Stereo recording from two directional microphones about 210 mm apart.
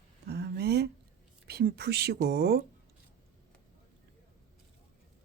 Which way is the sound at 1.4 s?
45° right (ahead or behind).